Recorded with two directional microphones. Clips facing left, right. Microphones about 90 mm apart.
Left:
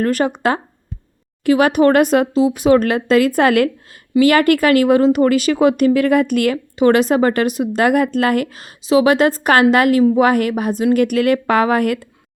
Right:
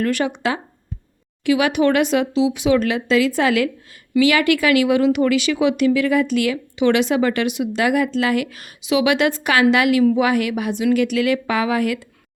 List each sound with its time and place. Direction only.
0.0 s speech: 40° left (ahead or behind)
8.4 s a woman's voice: 35° left (ahead or behind); by 12.0 s 50° left (ahead or behind)